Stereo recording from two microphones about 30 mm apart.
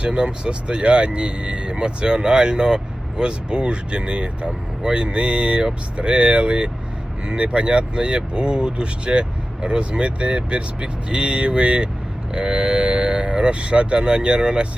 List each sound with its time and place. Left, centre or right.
0.0 s speech: right